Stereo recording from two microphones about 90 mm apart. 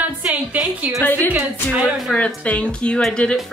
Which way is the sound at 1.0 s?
20° left (ahead or behind).